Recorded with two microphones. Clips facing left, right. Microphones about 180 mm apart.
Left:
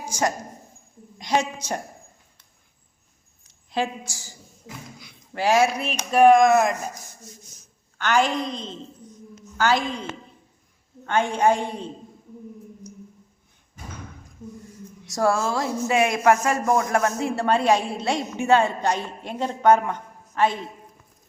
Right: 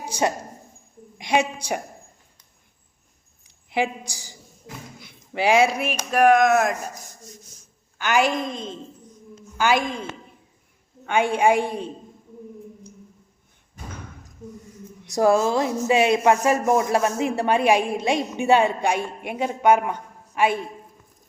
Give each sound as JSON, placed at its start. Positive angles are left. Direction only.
{"t": 1.3, "sound": "speech", "side_deg": -10}
{"t": 3.4, "sound": "a woman's voice", "side_deg": -15}
{"t": 7.9, "sound": "speech", "side_deg": -10}
{"t": 9.6, "sound": "speech", "side_deg": -10}
{"t": 15.1, "sound": "speech", "side_deg": -20}